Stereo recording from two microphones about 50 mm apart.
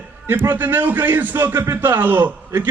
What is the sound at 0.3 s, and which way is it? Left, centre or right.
A man's voice, right.